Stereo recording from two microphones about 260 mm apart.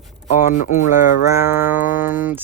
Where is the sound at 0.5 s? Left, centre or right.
Left.